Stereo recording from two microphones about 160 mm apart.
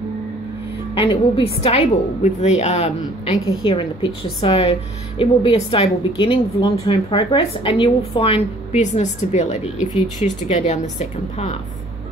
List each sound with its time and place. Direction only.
0.9 s a woman's voice: 35° left (ahead or behind)
3.6 s a woman's voice: 30° left (ahead or behind)